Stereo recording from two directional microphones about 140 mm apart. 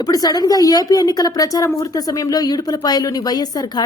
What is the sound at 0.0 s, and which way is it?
Speech, 25° left (ahead or behind).